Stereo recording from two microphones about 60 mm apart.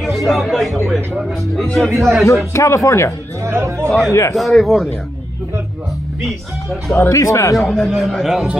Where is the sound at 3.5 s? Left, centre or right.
Right.